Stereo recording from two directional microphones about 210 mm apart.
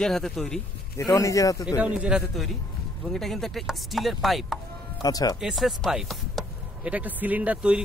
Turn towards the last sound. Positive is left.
turn(degrees=-5)  # may be behind; listen again after turning